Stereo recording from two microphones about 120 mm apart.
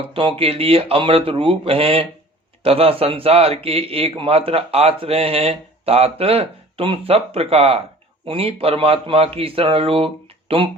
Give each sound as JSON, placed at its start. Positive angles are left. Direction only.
{"t": 0.0, "sound": "a man's voice", "side_deg": -50}